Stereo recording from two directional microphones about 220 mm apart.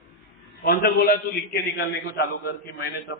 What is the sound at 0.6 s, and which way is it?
A man's voice, 45° left (ahead or behind).